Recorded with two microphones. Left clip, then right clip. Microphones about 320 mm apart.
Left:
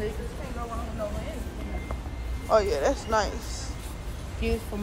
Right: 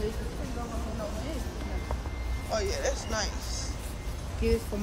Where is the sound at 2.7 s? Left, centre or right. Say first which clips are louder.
Left 7 dB; centre.